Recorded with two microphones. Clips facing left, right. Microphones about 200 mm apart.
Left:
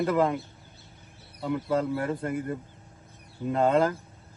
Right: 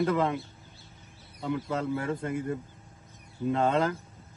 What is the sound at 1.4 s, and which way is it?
Speech, centre (ahead or behind).